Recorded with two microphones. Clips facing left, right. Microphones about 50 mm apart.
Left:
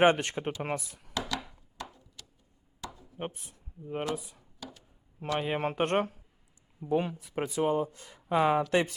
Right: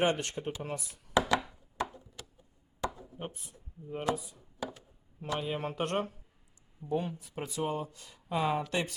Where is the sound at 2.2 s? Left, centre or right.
Right.